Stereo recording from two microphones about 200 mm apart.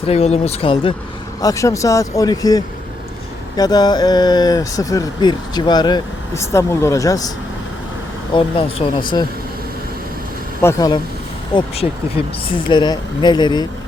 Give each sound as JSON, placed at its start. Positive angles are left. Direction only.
{"t": 0.0, "sound": "speech", "side_deg": 30}
{"t": 1.4, "sound": "speech", "side_deg": 15}
{"t": 8.4, "sound": "speech", "side_deg": 25}
{"t": 10.6, "sound": "speech", "side_deg": 15}
{"t": 12.7, "sound": "speech", "side_deg": 20}